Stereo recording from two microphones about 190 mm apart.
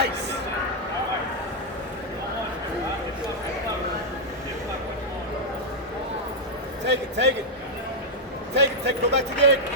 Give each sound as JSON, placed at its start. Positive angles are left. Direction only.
{"t": 6.8, "sound": "a man's voice", "side_deg": -65}
{"t": 8.5, "sound": "speech", "side_deg": -65}